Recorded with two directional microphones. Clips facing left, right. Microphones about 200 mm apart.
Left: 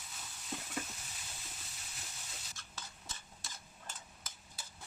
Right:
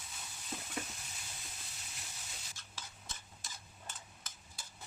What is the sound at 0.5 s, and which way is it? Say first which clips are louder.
Stir: left 1 dB; centre (ahead or behind).